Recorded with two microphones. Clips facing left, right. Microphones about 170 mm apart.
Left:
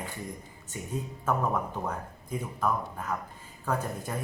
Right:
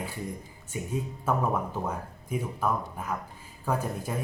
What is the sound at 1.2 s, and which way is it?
A man's voice, 10° right (ahead or behind).